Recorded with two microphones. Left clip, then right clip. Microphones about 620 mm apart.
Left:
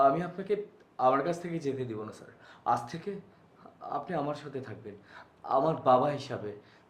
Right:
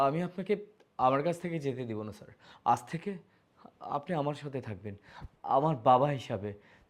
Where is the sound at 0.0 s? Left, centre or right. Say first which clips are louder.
Left 4 dB; right.